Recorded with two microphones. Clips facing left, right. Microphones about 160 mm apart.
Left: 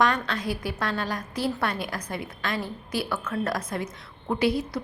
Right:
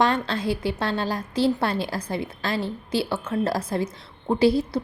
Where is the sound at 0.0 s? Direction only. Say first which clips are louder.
Right 2 dB; 30° right (ahead or behind).